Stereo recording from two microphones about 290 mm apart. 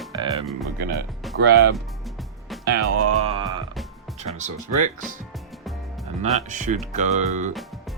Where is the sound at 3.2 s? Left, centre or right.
Centre.